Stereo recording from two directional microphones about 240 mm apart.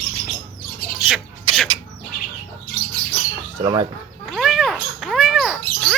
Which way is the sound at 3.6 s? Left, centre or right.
Centre.